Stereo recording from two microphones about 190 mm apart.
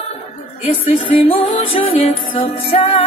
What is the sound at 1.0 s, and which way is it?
Music, 30° left (ahead or behind).